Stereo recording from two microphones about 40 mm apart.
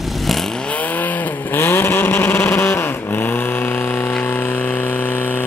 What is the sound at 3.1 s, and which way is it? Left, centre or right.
Chainsaw, left.